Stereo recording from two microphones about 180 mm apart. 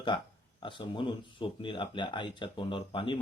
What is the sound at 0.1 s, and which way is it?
Speech, 25° left (ahead or behind).